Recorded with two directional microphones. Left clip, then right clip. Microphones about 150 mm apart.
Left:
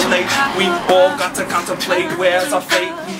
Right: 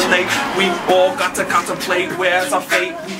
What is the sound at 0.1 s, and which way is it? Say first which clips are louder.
Speech: left 1 dB; centre (ahead or behind).